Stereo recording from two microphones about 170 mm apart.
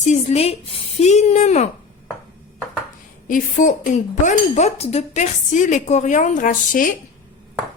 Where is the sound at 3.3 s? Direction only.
50° left (ahead or behind).